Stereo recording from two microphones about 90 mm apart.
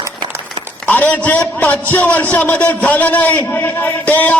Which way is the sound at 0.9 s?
20° left (ahead or behind).